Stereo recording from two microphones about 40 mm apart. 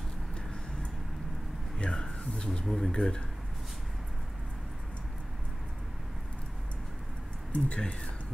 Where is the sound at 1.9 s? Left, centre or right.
Centre.